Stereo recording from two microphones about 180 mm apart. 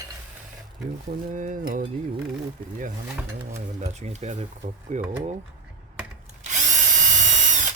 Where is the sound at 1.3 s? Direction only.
45° right (ahead or behind).